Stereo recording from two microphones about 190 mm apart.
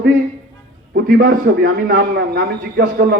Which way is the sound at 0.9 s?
50° right (ahead or behind).